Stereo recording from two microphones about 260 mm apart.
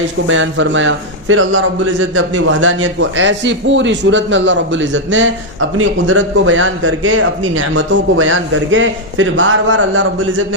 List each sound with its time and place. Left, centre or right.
0.3 s a man's voice: right